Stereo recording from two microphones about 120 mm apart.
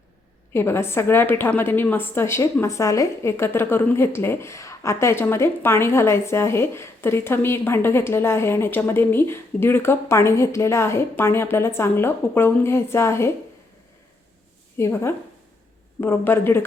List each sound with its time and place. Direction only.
0.5 s a woman's voice: 20° left (ahead or behind)
14.8 s a woman's voice: 20° left (ahead or behind)